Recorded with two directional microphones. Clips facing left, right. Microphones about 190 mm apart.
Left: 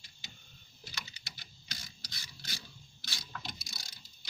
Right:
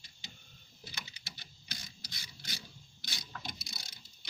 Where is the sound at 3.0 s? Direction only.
20° right (ahead or behind).